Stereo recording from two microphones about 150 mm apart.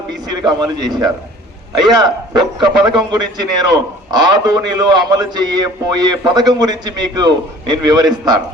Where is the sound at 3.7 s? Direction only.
30° right (ahead or behind).